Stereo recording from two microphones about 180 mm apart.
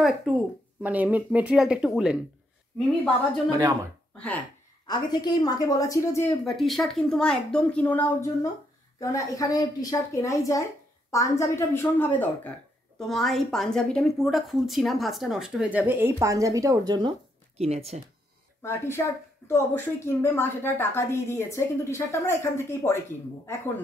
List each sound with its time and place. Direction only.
0.0 s a woman's voice: 5° right (ahead or behind)
3.4 s speech: 20° right (ahead or behind)
4.8 s a woman's voice: 25° left (ahead or behind)
6.4 s a woman's voice: centre (ahead or behind); by 17.1 s 20° right (ahead or behind)
17.6 s speech: 35° right (ahead or behind)
18.6 s a woman's voice: 15° left (ahead or behind)